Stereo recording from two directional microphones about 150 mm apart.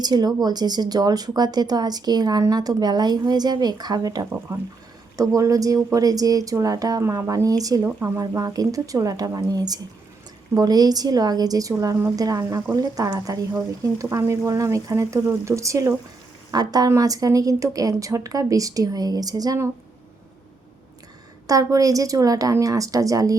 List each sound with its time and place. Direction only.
0.0 s a woman's voice: 25° right (ahead or behind)
21.4 s speech: 20° right (ahead or behind)